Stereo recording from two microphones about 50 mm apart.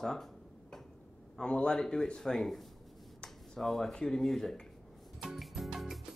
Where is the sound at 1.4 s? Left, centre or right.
Centre.